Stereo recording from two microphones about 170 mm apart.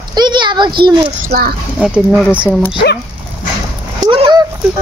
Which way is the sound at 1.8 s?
5° right (ahead or behind).